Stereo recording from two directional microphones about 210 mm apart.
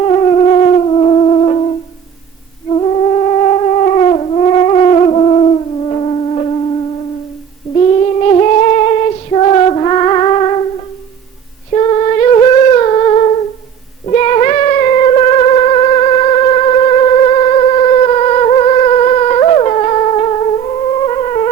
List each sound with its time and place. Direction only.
0.0 s theremin: 25° left (ahead or behind)
2.7 s theremin: 30° left (ahead or behind)
7.8 s music: 30° left (ahead or behind)
11.7 s humming: 30° left (ahead or behind)
14.0 s cat: 30° left (ahead or behind)
21.1 s theremin: 30° left (ahead or behind)